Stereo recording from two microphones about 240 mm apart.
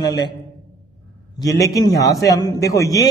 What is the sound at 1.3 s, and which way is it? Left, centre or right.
A man's voice, centre.